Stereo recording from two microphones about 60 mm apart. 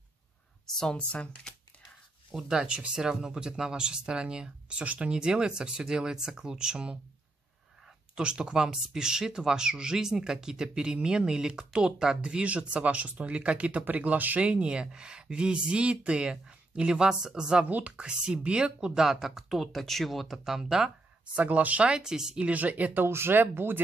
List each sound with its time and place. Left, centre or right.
0.9 s speech: left
2.3 s speech: centre
8.2 s speech: centre
17.6 s speech: right; by 20.9 s centre
21.4 s speech: right; by 22.4 s centre
22.4 s speech: right
23.0 s speech: right